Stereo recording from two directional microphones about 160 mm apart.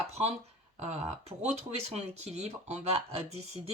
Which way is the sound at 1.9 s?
45° right (ahead or behind).